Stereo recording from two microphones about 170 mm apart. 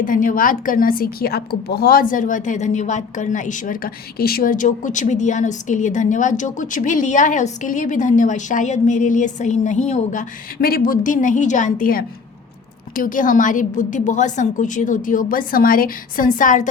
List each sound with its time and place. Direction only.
0.0 s a woman's voice: 55° left (ahead or behind)